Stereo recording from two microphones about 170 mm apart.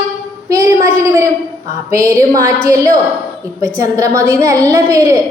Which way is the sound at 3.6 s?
20° right (ahead or behind).